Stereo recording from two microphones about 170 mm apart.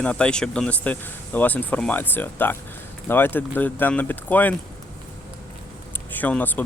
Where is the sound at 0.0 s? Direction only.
5° left (ahead or behind).